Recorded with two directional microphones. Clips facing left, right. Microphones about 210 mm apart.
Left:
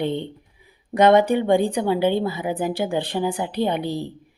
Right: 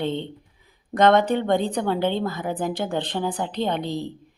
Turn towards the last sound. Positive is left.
turn(degrees=10)  # may be behind; listen again after turning